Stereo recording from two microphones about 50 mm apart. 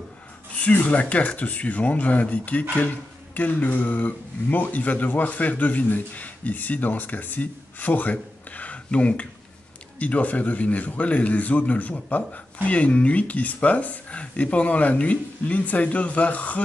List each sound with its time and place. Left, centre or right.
0.6 s speech: left